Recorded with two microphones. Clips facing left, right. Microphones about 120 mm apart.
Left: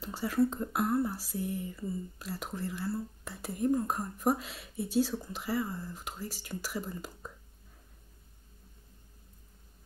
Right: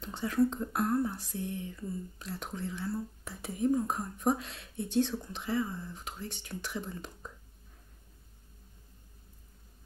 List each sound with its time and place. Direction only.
0.0 s speech: 5° left (ahead or behind)